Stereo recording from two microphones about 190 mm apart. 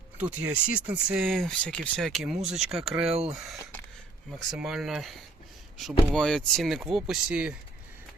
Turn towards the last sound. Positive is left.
turn(degrees=-5)  # may be behind; listen again after turning